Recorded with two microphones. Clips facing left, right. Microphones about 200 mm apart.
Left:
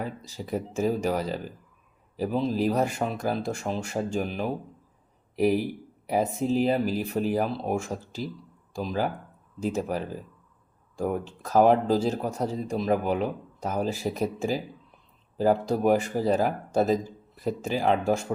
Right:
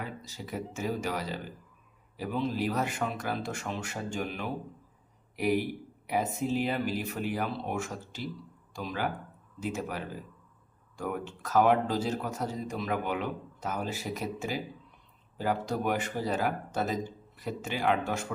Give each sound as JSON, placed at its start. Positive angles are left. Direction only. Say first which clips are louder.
{"t": 0.0, "sound": "speech", "louder": "left 5 dB", "side_deg": 35}